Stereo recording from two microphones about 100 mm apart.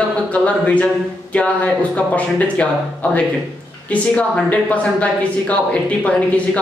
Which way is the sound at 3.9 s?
15° left (ahead or behind).